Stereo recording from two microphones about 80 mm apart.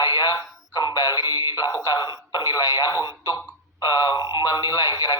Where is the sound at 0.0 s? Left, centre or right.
Left.